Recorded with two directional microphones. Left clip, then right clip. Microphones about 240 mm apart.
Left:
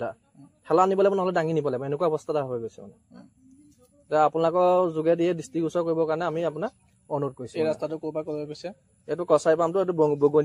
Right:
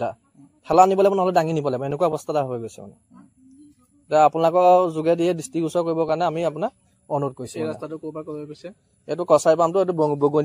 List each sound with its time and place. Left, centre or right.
0.7 s a man's voice: right
4.1 s a man's voice: right
7.5 s speech: centre
9.0 s a man's voice: right